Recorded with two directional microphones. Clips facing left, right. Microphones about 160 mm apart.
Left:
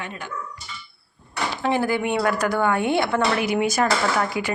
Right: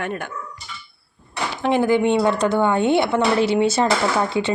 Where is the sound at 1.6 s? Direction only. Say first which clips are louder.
Right 5 dB; 20° right (ahead or behind).